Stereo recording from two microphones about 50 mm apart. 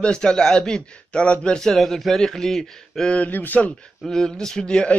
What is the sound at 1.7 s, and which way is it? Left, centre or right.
Speech, centre.